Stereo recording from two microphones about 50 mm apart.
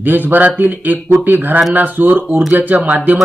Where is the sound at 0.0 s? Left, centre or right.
Right.